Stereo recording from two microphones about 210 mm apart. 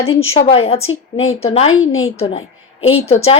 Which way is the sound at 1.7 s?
75° left (ahead or behind).